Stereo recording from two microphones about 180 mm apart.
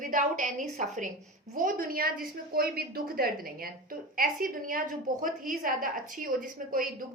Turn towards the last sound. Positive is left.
turn(degrees=-50)  # may be behind; listen again after turning